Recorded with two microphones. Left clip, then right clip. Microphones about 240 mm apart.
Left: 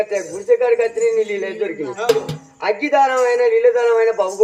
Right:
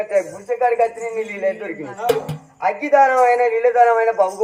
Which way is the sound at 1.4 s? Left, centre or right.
Left.